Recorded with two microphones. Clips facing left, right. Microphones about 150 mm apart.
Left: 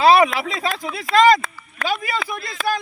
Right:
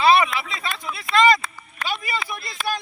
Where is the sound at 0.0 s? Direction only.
90° left.